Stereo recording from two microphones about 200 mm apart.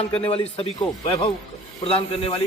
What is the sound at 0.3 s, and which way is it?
A man's voice, 30° left (ahead or behind).